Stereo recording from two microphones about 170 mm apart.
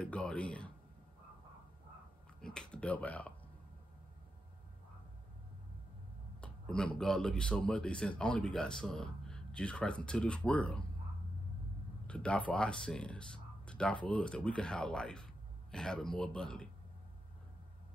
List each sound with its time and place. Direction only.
0.0 s speech: 5° left (ahead or behind)
2.4 s speech: 5° left (ahead or behind)
6.4 s speech: 5° left (ahead or behind)
12.1 s speech: 5° left (ahead or behind)